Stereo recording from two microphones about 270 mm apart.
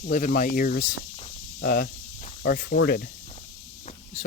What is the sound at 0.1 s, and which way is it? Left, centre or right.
Speech, left.